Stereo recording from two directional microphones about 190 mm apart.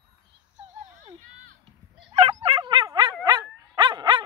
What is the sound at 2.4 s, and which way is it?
Dog, 25° right (ahead or behind).